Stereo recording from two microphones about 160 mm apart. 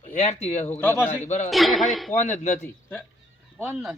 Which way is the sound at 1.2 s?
50° left (ahead or behind).